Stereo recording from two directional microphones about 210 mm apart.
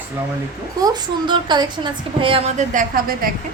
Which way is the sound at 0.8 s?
20° right (ahead or behind).